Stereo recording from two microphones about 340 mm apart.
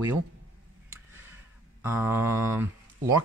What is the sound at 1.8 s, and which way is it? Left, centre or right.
Speech, centre.